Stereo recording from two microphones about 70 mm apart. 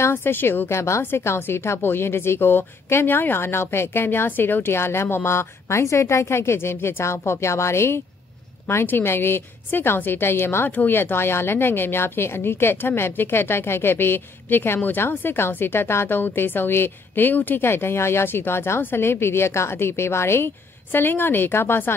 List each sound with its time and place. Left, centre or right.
0.0 s speech: left